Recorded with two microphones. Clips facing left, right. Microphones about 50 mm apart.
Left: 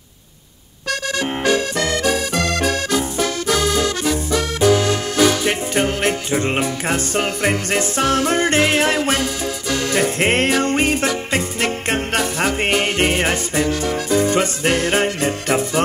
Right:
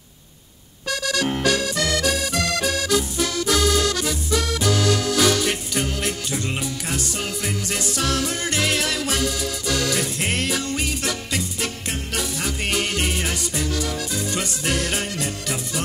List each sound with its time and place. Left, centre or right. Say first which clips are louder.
1.1 s music: left 3 dB; left